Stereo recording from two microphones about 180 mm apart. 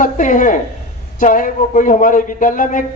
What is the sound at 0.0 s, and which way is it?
A man's voice, 45° left (ahead or behind).